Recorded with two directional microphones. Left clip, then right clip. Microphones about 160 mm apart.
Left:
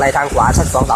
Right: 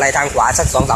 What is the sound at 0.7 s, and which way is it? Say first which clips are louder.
Speech: left 1 dB; 30° left (ahead or behind).